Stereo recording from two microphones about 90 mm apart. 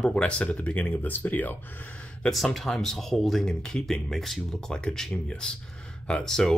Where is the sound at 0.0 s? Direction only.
10° left (ahead or behind).